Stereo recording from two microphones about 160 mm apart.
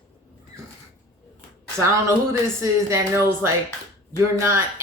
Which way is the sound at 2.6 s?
15° right (ahead or behind).